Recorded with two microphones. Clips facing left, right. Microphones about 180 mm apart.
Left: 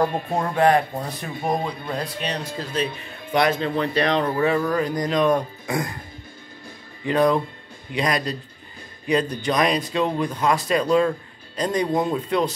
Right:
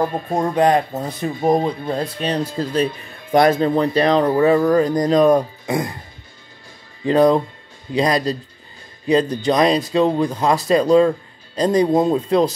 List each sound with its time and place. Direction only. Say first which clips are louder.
0.0 s speech: right 3 dB; 15° right (ahead or behind)
2.8 s speech: right 6 dB; 45° right (ahead or behind)
5.7 s speech: right 3 dB; 20° right (ahead or behind)
7.1 s speech: right 5 dB; 35° right (ahead or behind)